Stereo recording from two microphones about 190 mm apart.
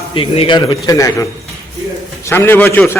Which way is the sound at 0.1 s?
25° left (ahead or behind).